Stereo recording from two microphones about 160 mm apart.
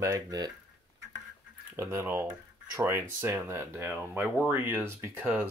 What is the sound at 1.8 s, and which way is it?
Speech, 15° right (ahead or behind).